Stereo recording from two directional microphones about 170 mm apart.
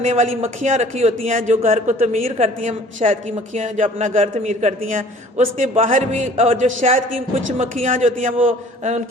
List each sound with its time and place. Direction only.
0.0 s a man's voice: 45° right (ahead or behind)